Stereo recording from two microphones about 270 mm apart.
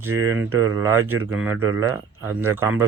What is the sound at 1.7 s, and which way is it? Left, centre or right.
Speech, right.